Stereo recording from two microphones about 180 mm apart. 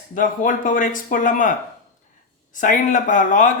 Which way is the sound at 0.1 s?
45° left (ahead or behind).